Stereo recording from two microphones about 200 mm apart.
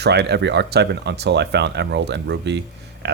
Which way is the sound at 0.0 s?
55° right (ahead or behind).